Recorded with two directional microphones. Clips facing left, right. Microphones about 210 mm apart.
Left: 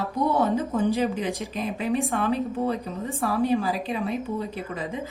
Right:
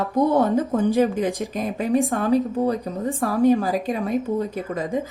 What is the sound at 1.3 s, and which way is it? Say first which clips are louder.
Speech: right 4 dB; centre (ahead or behind).